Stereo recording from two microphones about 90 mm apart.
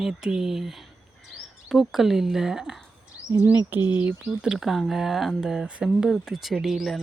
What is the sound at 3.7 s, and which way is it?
Speech, 20° right (ahead or behind).